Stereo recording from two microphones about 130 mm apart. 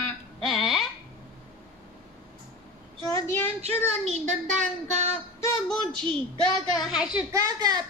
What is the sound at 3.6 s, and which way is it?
Speech, 55° right (ahead or behind).